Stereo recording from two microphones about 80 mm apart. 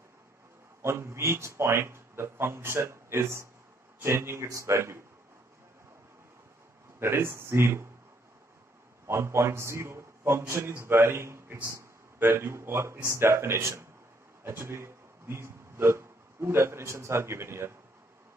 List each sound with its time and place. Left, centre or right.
0.8 s a man's voice: right
7.0 s a man's voice: right
9.0 s a man's voice: right